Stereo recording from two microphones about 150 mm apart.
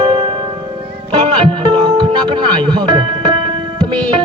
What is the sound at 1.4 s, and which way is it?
Music, 30° right (ahead or behind).